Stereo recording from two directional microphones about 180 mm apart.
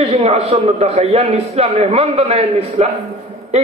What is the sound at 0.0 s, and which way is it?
A man's voice, 35° right (ahead or behind).